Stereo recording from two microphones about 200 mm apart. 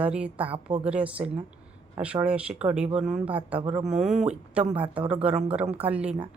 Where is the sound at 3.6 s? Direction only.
30° right (ahead or behind).